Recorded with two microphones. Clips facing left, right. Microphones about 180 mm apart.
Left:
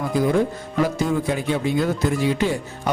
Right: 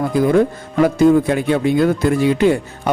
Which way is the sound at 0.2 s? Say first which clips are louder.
Right 5 dB; 60° right (ahead or behind).